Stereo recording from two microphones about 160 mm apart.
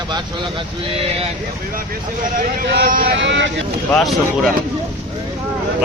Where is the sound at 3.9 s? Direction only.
5° left (ahead or behind).